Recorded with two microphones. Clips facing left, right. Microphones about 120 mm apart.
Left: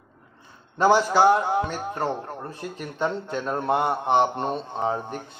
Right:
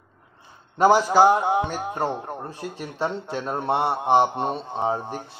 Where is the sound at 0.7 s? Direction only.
15° right (ahead or behind).